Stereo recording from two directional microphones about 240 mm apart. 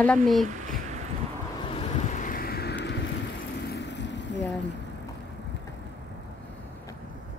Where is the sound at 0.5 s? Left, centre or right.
Right.